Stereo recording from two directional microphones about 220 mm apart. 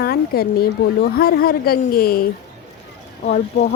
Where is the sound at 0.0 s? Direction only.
45° left (ahead or behind).